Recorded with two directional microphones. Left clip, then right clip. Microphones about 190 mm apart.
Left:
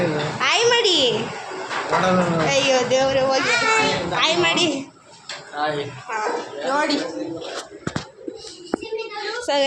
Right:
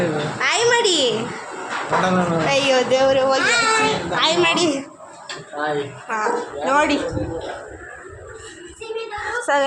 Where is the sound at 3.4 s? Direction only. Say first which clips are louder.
Right 2 dB; 50° right (ahead or behind).